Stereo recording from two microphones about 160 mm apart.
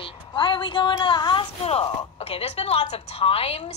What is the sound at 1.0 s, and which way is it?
A woman's voice, 30° left (ahead or behind).